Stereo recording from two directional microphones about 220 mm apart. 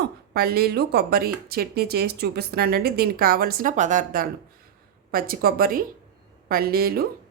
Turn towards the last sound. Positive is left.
turn(degrees=-45)  # may be behind; listen again after turning